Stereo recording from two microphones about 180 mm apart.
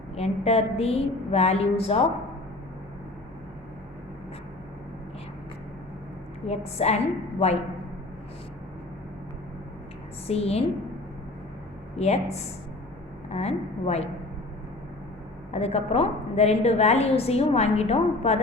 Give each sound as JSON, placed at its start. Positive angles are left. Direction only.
{"t": 0.2, "sound": "a woman's voice", "side_deg": 35}
{"t": 6.4, "sound": "a woman's voice", "side_deg": 35}
{"t": 10.2, "sound": "a woman's voice", "side_deg": 35}
{"t": 11.9, "sound": "a woman's voice", "side_deg": 35}
{"t": 15.5, "sound": "a woman's voice", "side_deg": 35}